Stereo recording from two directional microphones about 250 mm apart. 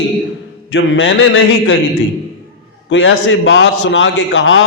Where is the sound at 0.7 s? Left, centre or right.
Left.